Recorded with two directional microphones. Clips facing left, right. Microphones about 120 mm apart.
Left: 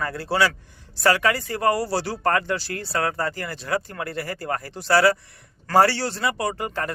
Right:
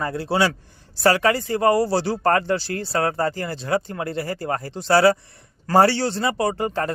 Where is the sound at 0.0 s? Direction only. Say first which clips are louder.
Right 1 dB; 20° right (ahead or behind).